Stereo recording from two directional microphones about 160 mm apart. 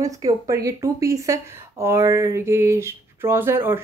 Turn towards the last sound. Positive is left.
turn(degrees=-15)  # may be behind; listen again after turning